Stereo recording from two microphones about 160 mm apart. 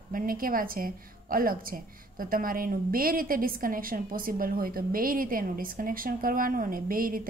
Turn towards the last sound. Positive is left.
turn(degrees=-60)  # may be behind; listen again after turning